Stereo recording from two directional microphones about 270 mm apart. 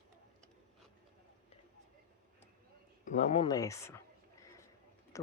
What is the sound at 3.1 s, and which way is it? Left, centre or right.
Speech, left.